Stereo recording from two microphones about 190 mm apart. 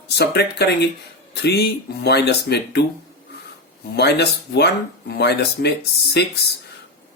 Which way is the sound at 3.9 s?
60° left (ahead or behind).